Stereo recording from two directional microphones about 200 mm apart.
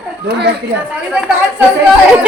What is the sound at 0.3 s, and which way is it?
Speech, 55° right (ahead or behind).